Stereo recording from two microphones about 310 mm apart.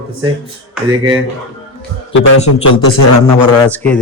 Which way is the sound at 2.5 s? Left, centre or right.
Left.